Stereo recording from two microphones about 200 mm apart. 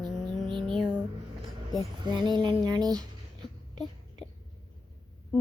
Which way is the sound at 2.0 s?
20° right (ahead or behind).